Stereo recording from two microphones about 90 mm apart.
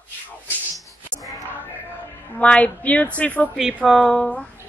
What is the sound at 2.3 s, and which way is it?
A woman's voice, 15° left (ahead or behind).